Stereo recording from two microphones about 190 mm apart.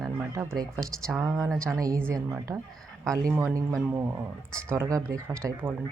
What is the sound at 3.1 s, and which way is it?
A man's voice, 15° right (ahead or behind).